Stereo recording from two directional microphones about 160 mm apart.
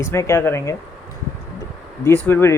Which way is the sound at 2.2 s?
15° left (ahead or behind).